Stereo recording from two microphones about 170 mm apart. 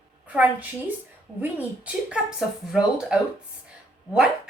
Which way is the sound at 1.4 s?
10° right (ahead or behind).